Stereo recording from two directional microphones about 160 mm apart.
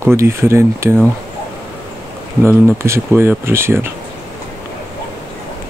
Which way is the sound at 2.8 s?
15° right (ahead or behind).